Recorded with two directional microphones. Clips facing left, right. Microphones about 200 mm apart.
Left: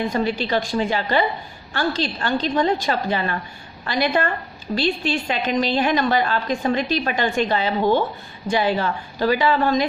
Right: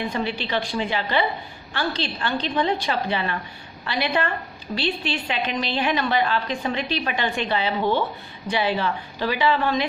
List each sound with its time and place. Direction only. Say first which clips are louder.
0.1 s a woman's voice: left 4 dB; 45° left (ahead or behind)